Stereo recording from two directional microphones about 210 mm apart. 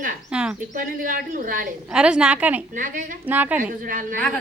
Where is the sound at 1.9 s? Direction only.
5° right (ahead or behind).